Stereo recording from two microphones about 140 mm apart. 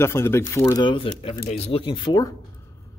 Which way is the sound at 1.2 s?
50° left (ahead or behind).